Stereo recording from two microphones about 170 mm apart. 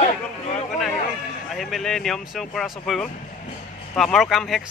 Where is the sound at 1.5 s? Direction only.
Centre (ahead or behind).